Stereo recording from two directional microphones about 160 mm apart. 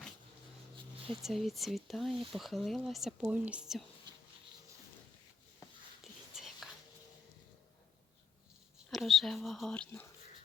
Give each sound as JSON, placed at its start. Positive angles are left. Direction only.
{"t": 1.2, "sound": "speech", "side_deg": 0}
{"t": 6.3, "sound": "whispering", "side_deg": 0}
{"t": 8.9, "sound": "speech", "side_deg": 0}